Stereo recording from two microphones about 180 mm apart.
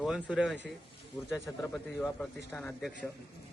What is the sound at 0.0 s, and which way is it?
Speech, 5° right (ahead or behind).